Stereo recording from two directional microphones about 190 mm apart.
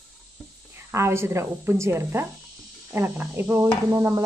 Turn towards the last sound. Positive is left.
turn(degrees=-15)  # may be behind; listen again after turning